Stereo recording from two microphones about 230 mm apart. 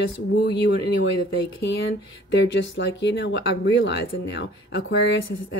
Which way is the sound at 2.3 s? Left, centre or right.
Left.